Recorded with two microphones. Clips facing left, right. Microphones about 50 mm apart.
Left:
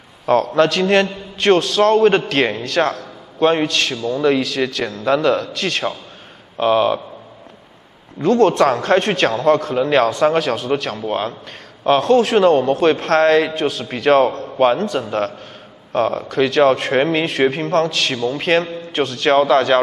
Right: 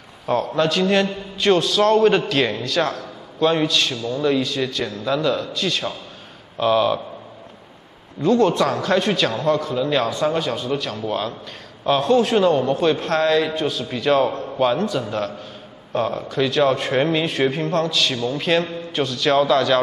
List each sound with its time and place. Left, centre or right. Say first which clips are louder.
0.6 s a man's voice: left 2 dB; left
3.9 s speech: left 4 dB; left
4.2 s a man's voice: left 3 dB; left
6.6 s speech: left 3 dB; left
8.2 s a man's voice: left 3 dB; left
11.1 s speech: left 3 dB; left
11.8 s a man's voice: left 3 dB; left
18.1 s speech: left 3 dB; left
18.4 s a man's voice: left 3 dB; left